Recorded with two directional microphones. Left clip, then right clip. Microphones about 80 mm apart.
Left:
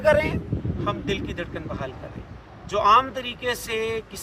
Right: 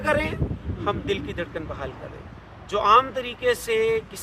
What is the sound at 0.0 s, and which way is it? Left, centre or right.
A woman's voice, right.